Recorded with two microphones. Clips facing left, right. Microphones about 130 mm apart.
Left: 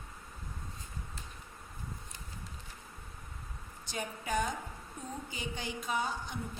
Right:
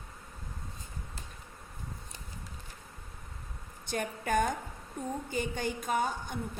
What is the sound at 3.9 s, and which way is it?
A woman's voice, 55° right (ahead or behind).